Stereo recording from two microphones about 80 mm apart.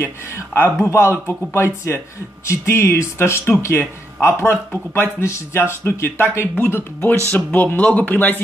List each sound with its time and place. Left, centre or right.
0.6 s speech: left